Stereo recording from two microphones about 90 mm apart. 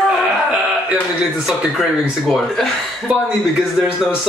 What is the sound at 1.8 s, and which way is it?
A man's voice, centre (ahead or behind).